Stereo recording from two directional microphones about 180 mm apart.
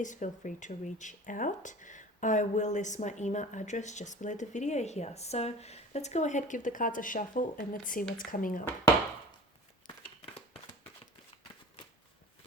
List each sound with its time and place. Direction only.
0.0 s speech: 45° left (ahead or behind)